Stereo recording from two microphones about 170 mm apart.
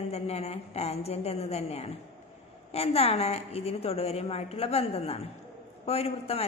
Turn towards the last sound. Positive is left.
turn(degrees=35)  # may be behind; listen again after turning